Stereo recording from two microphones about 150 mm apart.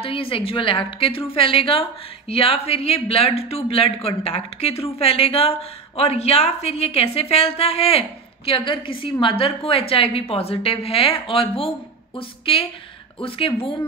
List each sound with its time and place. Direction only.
0.0 s a woman's voice: 35° left (ahead or behind)